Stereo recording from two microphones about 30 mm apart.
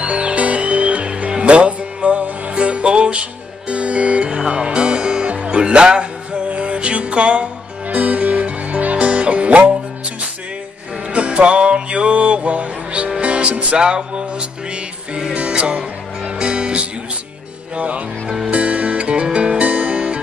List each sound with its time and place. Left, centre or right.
0.0 s music: right
5.4 s speech: right
6.5 s music: right
7.9 s music: right
11.1 s music: right
13.7 s music: right
15.3 s music: right
16.3 s music: right
17.7 s speech: right
18.5 s music: right